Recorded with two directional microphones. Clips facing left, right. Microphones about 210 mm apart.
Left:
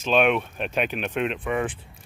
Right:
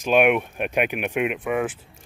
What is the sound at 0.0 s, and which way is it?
Speech, 10° right (ahead or behind).